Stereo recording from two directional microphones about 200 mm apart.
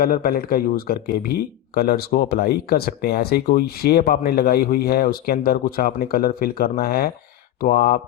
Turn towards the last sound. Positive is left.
turn(degrees=45)  # may be behind; listen again after turning